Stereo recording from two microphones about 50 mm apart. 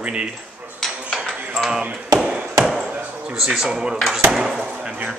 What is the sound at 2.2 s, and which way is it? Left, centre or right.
Ping, centre.